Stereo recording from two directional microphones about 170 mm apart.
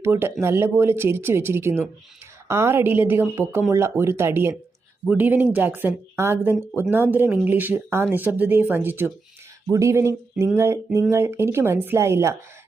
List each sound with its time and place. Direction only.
0.0 s speech: 15° right (ahead or behind)